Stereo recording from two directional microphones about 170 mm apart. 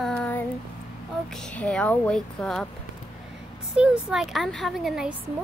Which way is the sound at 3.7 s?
5° right (ahead or behind).